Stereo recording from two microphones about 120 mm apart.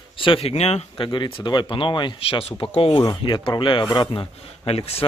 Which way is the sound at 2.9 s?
30° left (ahead or behind).